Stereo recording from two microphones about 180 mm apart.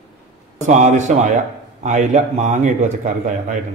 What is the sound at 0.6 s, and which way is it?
A man's voice, 40° right (ahead or behind).